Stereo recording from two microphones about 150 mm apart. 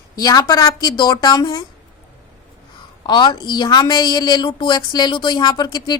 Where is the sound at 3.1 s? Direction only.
30° left (ahead or behind).